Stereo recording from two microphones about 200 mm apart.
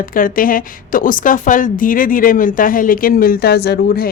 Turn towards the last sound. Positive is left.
turn(degrees=55)  # may be behind; listen again after turning